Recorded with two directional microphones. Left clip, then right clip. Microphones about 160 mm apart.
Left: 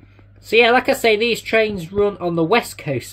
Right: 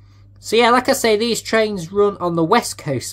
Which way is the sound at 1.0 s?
90° right.